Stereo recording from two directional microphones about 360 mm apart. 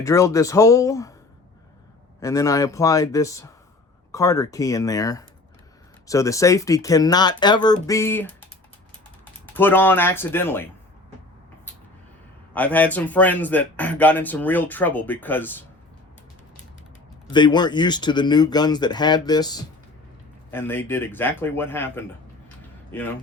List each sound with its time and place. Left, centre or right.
0.0 s speech: centre
2.2 s speech: centre
9.6 s speech: centre
12.5 s speech: centre
17.3 s speech: centre